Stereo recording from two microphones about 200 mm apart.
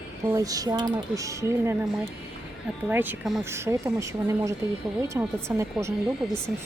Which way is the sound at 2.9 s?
10° right (ahead or behind).